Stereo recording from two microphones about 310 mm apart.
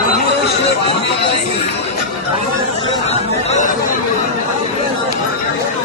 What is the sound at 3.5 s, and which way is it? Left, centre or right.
Speech, left.